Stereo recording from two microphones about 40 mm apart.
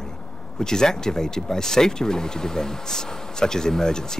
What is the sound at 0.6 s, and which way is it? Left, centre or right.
Speech, centre.